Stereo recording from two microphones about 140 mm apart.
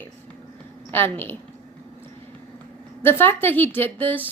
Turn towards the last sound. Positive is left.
turn(degrees=15)  # may be behind; listen again after turning